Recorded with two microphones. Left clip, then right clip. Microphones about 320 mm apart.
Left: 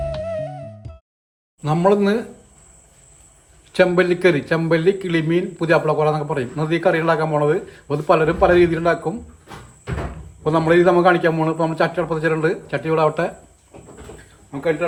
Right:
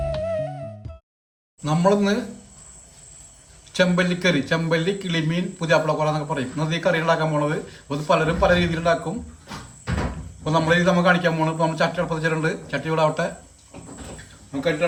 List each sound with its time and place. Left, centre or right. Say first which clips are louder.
0.0 s music: even; centre
1.6 s speech: left 3 dB; left
3.7 s speech: left 5 dB; centre
10.4 s speech: left 4 dB; centre